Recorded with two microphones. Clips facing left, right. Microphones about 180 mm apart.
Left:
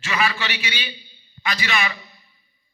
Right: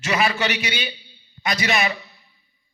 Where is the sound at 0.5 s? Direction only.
40° right (ahead or behind).